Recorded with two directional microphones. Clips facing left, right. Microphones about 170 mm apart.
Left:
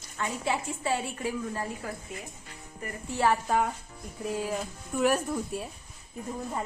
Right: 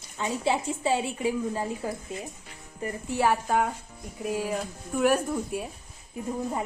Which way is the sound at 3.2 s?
5° right (ahead or behind).